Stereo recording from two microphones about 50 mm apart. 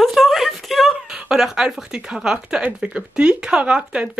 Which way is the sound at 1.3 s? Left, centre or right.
Centre.